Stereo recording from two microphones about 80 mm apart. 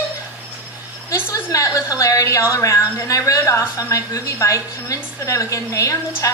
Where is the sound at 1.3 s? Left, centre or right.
Left.